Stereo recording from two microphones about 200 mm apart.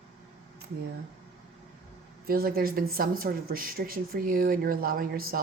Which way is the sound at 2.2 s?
50° right (ahead or behind).